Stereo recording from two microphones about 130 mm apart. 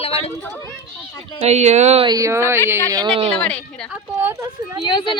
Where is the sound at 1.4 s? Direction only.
60° right (ahead or behind).